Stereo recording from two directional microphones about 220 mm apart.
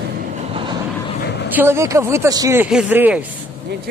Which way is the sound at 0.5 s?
25° right (ahead or behind).